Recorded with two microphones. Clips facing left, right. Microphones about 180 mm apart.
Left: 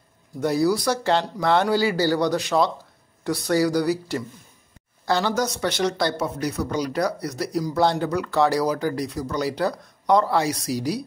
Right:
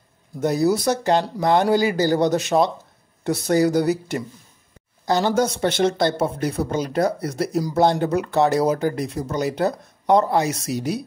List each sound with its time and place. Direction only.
0.4 s speech: 20° right (ahead or behind)
5.3 s speech: 30° right (ahead or behind)